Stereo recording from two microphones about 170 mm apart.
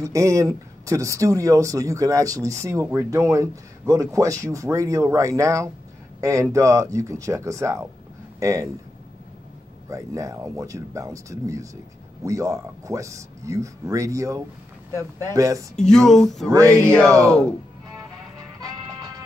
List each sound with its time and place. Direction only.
0.0 s speech: 20° right (ahead or behind)
9.8 s speech: 20° right (ahead or behind)
15.9 s speech: 5° left (ahead or behind)
16.4 s music: 15° right (ahead or behind)
16.9 s speech: 5° left (ahead or behind)
18.6 s music: 20° right (ahead or behind)